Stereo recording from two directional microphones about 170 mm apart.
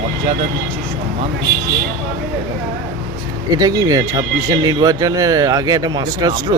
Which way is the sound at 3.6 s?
20° right (ahead or behind).